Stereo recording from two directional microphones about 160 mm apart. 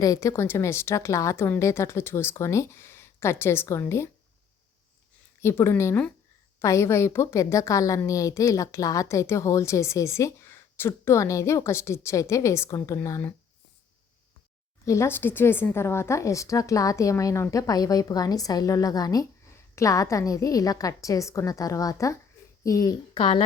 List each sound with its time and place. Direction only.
0.0 s speech: 20° left (ahead or behind)
5.4 s a woman's voice: 15° left (ahead or behind)
14.8 s a woman's voice: 15° left (ahead or behind)
23.1 s a woman's voice: 30° left (ahead or behind)